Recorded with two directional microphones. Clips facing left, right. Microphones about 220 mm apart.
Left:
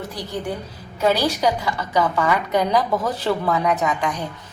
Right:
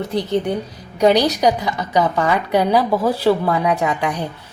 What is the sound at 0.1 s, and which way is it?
A woman's voice, 20° right (ahead or behind).